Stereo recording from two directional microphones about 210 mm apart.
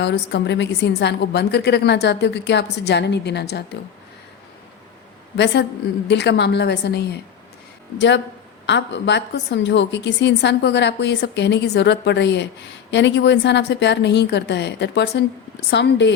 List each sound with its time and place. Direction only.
0.0 s a woman's voice: 55° left (ahead or behind)
6.1 s a woman's voice: 55° left (ahead or behind)